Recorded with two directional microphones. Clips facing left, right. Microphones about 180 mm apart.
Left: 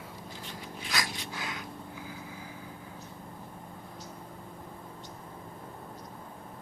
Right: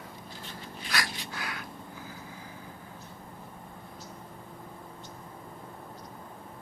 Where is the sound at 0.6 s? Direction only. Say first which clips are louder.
Right 1 dB; 20° left (ahead or behind).